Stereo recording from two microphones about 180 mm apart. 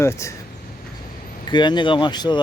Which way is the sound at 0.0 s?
15° left (ahead or behind).